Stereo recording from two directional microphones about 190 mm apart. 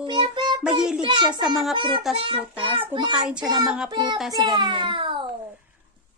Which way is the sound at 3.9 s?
25° right (ahead or behind).